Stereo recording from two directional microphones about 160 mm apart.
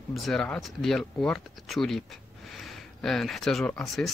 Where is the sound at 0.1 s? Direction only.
Centre (ahead or behind).